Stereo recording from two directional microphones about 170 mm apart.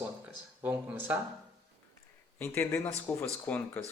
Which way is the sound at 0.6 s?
10° right (ahead or behind).